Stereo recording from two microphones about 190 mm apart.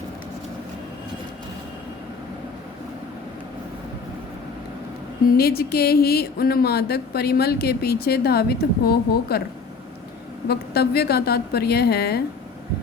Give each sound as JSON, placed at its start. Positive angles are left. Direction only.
{"t": 5.4, "sound": "speech", "side_deg": 55}
{"t": 10.5, "sound": "speech", "side_deg": 55}